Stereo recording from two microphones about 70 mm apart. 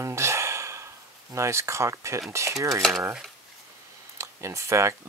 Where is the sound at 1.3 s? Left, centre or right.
Right.